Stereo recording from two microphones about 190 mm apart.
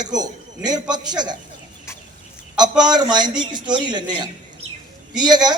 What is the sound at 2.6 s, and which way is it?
A man's voice, 20° right (ahead or behind).